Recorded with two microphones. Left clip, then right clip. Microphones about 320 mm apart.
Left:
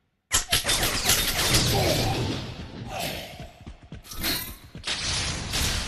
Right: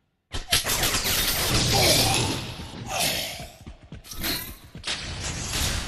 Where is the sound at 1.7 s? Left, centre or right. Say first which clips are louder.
Right 4 dB; right.